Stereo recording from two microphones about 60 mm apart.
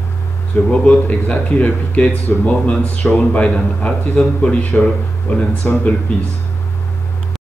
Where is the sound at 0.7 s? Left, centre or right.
Left.